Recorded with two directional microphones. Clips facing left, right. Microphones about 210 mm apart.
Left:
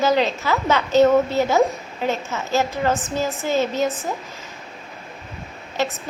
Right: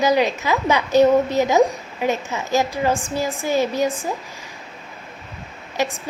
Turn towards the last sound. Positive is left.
turn(degrees=-15)  # may be behind; listen again after turning